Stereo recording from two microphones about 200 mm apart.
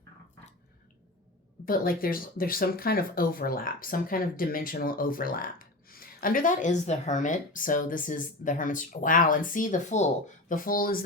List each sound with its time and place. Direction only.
1.6 s speech: 45° left (ahead or behind)